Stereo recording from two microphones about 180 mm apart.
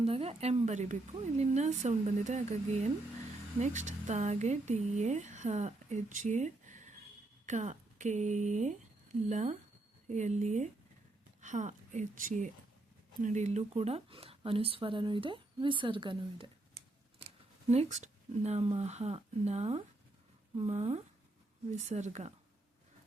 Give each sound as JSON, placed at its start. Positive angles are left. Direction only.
{"t": 0.0, "sound": "speech", "side_deg": -35}
{"t": 17.7, "sound": "speech", "side_deg": -40}